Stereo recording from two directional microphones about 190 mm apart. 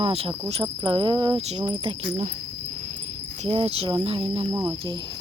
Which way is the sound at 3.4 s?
30° right (ahead or behind).